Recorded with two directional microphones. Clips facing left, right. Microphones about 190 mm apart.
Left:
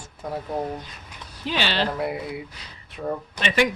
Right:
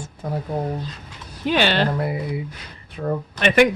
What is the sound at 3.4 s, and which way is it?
Speech, 55° right (ahead or behind).